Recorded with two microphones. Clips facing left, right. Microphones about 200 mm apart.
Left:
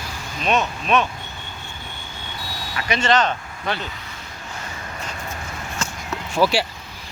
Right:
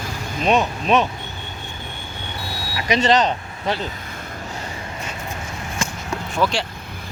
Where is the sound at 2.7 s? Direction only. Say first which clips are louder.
Right 4 dB; 20° right (ahead or behind).